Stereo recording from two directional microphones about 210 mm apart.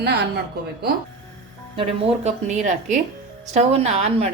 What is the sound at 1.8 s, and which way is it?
A woman's voice, 30° right (ahead or behind).